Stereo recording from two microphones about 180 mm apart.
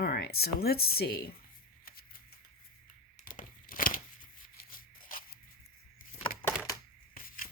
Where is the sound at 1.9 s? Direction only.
55° left (ahead or behind).